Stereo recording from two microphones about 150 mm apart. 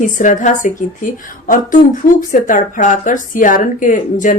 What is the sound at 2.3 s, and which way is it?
A woman's voice, 60° left (ahead or behind).